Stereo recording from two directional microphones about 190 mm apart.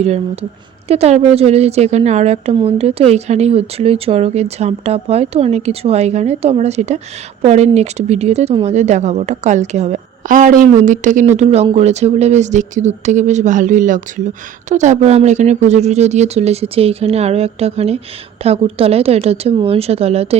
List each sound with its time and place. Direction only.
0.9 s speech: 35° right (ahead or behind)